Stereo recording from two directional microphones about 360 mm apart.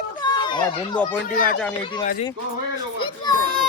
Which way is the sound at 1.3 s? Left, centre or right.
Left.